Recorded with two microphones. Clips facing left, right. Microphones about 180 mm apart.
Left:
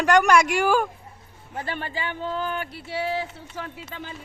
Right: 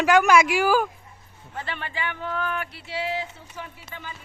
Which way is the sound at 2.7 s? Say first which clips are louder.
Left 2 dB; 60° left (ahead or behind).